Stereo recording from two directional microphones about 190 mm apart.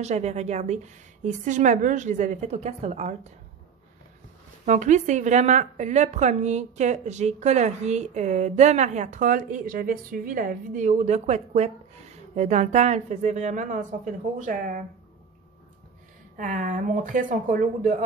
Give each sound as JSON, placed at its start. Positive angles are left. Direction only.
{"t": 0.0, "sound": "a woman's voice", "side_deg": -35}
{"t": 4.6, "sound": "a woman's voice", "side_deg": -40}
{"t": 16.3, "sound": "speech", "side_deg": -45}